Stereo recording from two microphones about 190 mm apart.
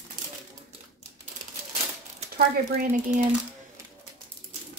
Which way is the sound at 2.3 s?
45° right (ahead or behind).